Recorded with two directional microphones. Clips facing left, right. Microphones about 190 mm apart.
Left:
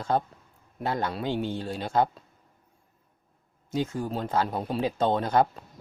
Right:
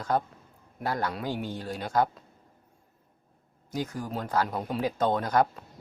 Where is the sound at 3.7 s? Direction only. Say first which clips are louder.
Left 4 dB; 25° left (ahead or behind).